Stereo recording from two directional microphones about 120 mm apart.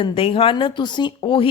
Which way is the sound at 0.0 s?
45° left (ahead or behind).